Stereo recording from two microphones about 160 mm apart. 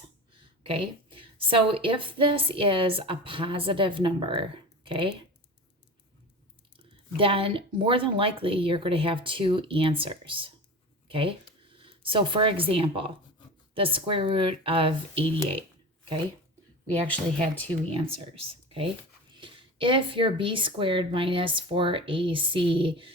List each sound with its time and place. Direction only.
0.6 s a woman's voice: 35° right (ahead or behind)
7.2 s a woman's voice: 35° right (ahead or behind)
16.8 s speech: 10° left (ahead or behind)
17.9 s a woman's voice: 35° right (ahead or behind)
19.3 s a woman's voice: 30° right (ahead or behind)